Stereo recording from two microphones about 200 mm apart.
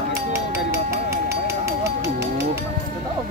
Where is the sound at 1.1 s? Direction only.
15° right (ahead or behind).